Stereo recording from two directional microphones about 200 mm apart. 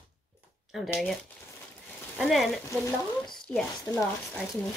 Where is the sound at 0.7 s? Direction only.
Centre (ahead or behind).